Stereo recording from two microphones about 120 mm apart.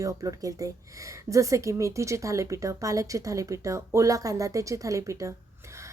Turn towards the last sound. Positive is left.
turn(degrees=-25)  # may be behind; listen again after turning